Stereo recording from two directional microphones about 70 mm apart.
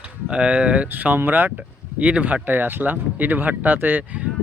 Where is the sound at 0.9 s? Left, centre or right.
Right.